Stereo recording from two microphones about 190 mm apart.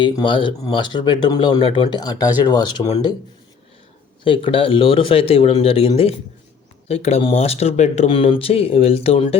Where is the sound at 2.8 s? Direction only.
35° left (ahead or behind).